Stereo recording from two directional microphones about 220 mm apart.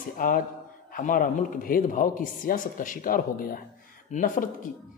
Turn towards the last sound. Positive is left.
turn(degrees=35)  # may be behind; listen again after turning